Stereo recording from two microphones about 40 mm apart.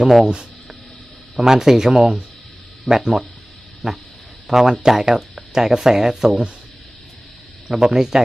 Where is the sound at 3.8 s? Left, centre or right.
Right.